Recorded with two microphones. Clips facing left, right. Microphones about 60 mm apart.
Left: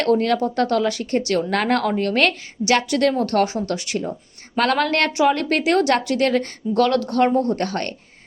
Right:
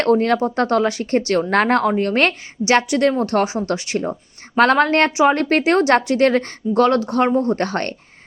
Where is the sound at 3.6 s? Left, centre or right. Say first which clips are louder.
Right 3 dB; right.